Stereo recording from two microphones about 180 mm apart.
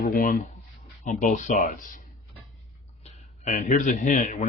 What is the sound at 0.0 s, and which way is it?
A man's voice, 50° left (ahead or behind).